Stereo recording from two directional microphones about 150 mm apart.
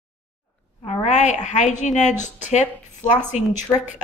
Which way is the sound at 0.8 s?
50° left (ahead or behind).